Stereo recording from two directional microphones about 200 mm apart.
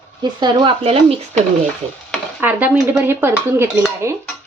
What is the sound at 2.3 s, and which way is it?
Speech, 10° right (ahead or behind).